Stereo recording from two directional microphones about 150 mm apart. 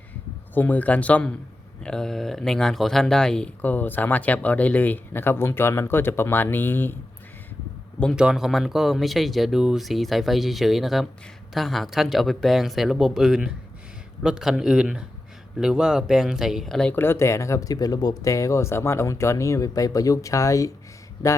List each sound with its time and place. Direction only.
0.5 s speech: 10° left (ahead or behind)
8.1 s speech: 5° right (ahead or behind)
16.9 s speech: 15° left (ahead or behind)